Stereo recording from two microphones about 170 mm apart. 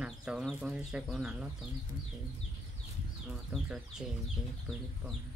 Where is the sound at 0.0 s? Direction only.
5° right (ahead or behind).